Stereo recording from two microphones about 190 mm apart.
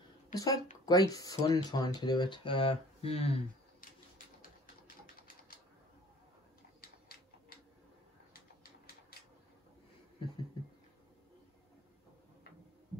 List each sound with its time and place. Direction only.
0.3 s speech: 20° left (ahead or behind)
4.4 s typewriter: 50° left (ahead or behind)
6.8 s a sound: 55° left (ahead or behind)